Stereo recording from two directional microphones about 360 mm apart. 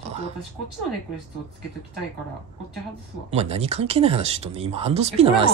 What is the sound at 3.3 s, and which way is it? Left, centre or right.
Speech, centre.